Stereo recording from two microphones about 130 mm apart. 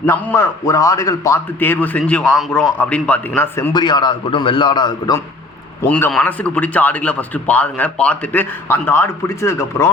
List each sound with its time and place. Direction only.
0.0 s a man's voice: 20° left (ahead or behind)
1.5 s a man's voice: 15° left (ahead or behind)
3.7 s a man's voice: 35° left (ahead or behind)
5.8 s a man's voice: 15° left (ahead or behind)
6.1 s a man's voice: 5° left (ahead or behind)